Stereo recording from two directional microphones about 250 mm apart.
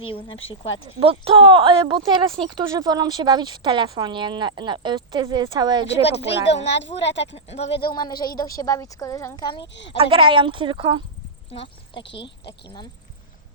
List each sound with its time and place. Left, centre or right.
0.0 s speech: left
0.9 s speech: right
6.0 s a woman's voice: left
10.0 s speech: centre
11.5 s speech: left
12.2 s speech: left